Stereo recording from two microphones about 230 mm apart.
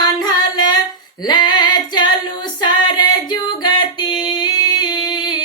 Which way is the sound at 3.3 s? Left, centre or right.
Centre.